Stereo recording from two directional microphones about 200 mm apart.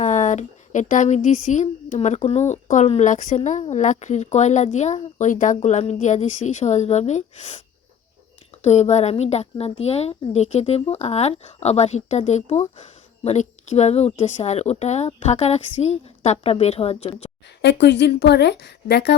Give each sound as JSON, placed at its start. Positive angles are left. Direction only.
{"t": 0.0, "sound": "a woman's voice", "side_deg": 35}
{"t": 8.6, "sound": "a woman's voice", "side_deg": 35}
{"t": 17.6, "sound": "a woman's voice", "side_deg": 60}